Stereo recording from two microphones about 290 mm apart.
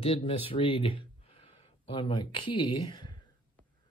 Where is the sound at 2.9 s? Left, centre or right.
Centre.